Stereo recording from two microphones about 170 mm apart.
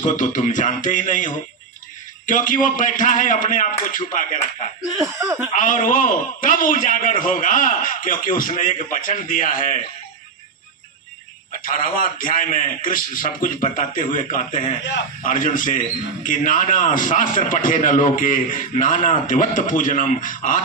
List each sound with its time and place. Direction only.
0.0 s a man's voice: 50° left (ahead or behind)
4.9 s speech: 20° right (ahead or behind)
5.5 s a man's voice: 50° left (ahead or behind)
11.6 s a man's voice: 55° left (ahead or behind)